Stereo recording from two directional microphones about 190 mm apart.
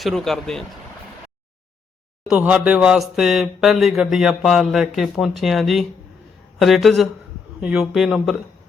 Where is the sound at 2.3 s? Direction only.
5° right (ahead or behind).